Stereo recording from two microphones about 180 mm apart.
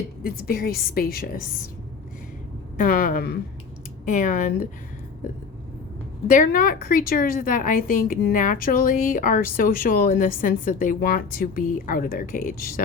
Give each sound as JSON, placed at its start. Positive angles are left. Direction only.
{"t": 0.2, "sound": "a woman's voice", "side_deg": 55}
{"t": 2.7, "sound": "a woman's voice", "side_deg": 50}
{"t": 6.2, "sound": "a woman's voice", "side_deg": 50}